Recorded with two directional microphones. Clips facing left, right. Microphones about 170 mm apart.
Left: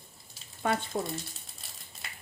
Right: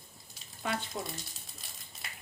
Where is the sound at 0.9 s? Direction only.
50° left (ahead or behind).